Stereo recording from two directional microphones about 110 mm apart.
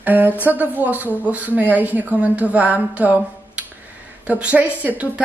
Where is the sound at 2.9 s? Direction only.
15° right (ahead or behind).